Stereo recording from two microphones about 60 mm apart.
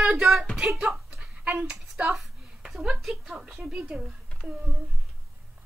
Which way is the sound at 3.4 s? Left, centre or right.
Centre.